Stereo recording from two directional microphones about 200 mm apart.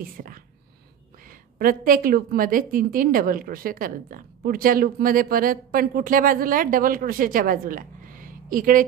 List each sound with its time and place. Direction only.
0.0 s a woman's voice: 45° right (ahead or behind)